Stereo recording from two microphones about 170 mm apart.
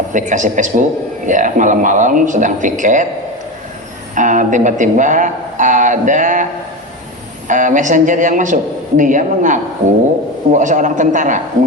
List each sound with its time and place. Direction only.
0.1 s speech: 50° right (ahead or behind)
4.1 s speech: 50° right (ahead or behind)